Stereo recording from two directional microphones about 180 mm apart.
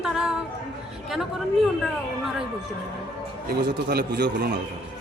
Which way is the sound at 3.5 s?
60° right (ahead or behind).